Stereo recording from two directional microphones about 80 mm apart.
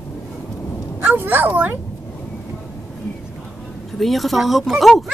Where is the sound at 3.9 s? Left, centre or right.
Centre.